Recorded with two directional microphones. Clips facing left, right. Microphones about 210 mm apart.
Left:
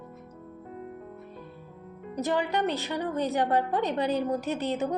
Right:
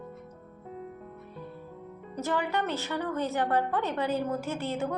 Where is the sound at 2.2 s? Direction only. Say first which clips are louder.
Left 3 dB; 15° left (ahead or behind).